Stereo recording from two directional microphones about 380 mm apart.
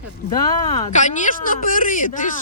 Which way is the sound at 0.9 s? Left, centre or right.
Centre.